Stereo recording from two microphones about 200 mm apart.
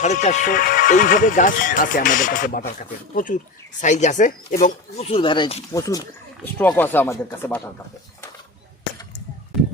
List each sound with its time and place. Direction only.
0.0 s speech: 35° left (ahead or behind)
3.8 s speech: 35° left (ahead or behind)
5.7 s speech: 15° left (ahead or behind)